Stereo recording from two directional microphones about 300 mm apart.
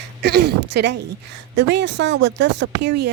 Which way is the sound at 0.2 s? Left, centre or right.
Right.